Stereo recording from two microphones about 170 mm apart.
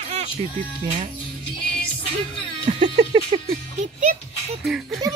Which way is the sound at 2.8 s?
35° right (ahead or behind).